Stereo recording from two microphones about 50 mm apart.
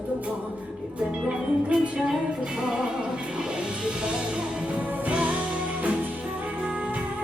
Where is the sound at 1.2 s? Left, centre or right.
Centre.